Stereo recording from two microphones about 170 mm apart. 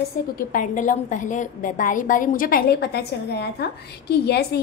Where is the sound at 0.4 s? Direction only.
55° left (ahead or behind).